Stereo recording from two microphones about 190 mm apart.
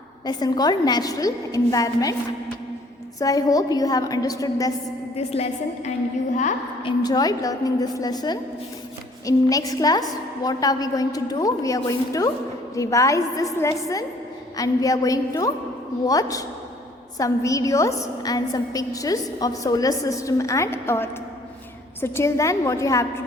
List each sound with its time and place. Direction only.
0.3 s a woman's voice: 20° left (ahead or behind)
3.2 s a woman's voice: 20° left (ahead or behind)
5.1 s a woman's voice: 35° left (ahead or behind)
6.8 s a woman's voice: 20° left (ahead or behind)